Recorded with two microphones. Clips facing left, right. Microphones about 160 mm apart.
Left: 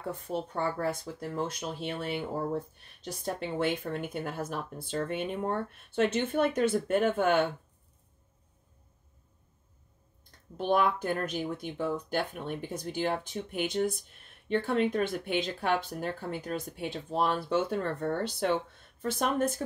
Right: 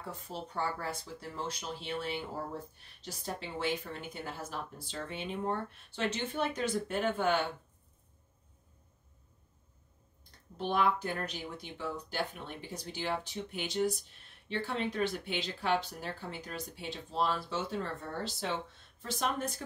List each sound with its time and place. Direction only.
0.1 s speech: 55° left (ahead or behind)
10.6 s speech: 50° left (ahead or behind)